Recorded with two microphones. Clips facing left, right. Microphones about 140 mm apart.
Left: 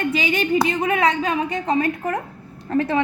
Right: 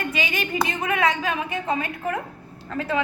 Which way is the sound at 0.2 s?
30° left (ahead or behind).